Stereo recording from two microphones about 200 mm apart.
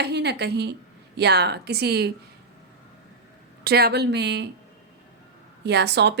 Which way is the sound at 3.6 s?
50° right (ahead or behind).